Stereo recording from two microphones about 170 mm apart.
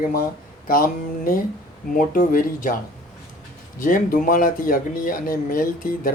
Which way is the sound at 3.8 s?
55° left (ahead or behind).